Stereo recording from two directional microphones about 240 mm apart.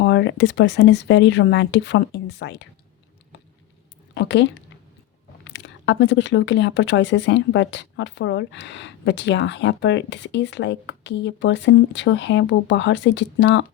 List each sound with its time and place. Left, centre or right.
0.0 s speech: left
4.1 s speech: left